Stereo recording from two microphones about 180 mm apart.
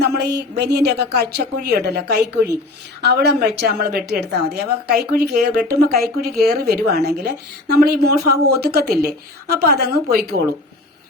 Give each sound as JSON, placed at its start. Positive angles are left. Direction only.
{"t": 0.0, "sound": "a woman's voice", "side_deg": -65}